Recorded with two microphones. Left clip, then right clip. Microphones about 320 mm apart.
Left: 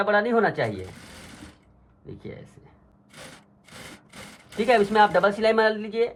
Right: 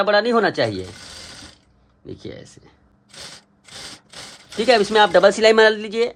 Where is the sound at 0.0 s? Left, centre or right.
Right.